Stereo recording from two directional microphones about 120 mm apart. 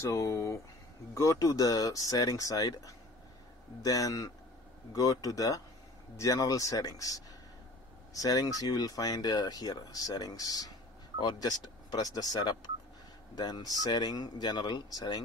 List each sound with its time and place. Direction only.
0.0 s speech: 25° left (ahead or behind)